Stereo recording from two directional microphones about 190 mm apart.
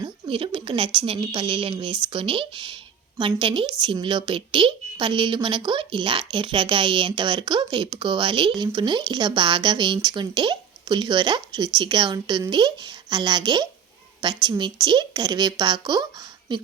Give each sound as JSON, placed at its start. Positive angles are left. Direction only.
{"t": 0.3, "sound": "a woman's voice", "side_deg": -25}